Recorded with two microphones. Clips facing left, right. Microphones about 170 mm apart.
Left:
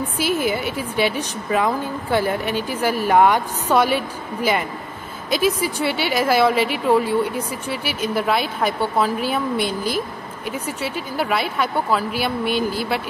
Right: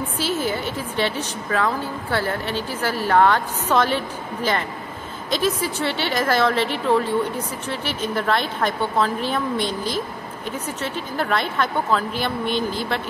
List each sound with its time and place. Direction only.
0.2 s a woman's voice: 10° left (ahead or behind)